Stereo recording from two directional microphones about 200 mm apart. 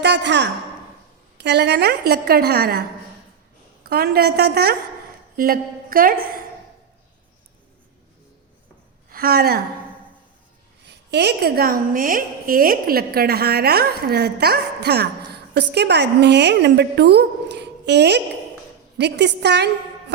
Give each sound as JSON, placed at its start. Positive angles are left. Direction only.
{"t": 0.0, "sound": "a woman's voice", "side_deg": -60}
{"t": 3.8, "sound": "a woman's voice", "side_deg": -50}
{"t": 9.0, "sound": "a woman's voice", "side_deg": -50}
{"t": 10.8, "sound": "a woman's voice", "side_deg": -55}